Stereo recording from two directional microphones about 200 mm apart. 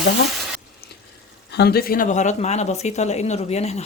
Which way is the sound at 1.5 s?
50° left (ahead or behind).